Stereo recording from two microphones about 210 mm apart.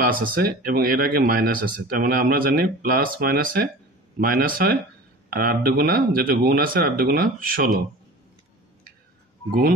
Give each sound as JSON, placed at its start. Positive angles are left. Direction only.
{"t": 0.1, "sound": "speech", "side_deg": -45}